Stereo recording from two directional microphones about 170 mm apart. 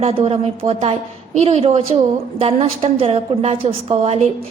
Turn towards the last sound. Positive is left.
turn(degrees=-35)  # may be behind; listen again after turning